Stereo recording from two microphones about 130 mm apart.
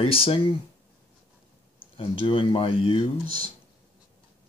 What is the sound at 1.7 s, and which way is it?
Speech, 45° left (ahead or behind).